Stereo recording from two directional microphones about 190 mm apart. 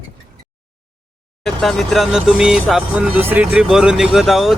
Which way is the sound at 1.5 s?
Centre (ahead or behind).